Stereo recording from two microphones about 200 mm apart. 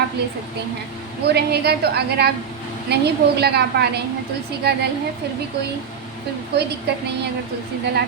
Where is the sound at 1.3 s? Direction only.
55° right (ahead or behind).